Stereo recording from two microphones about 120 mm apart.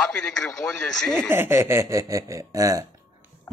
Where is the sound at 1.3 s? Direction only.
20° right (ahead or behind).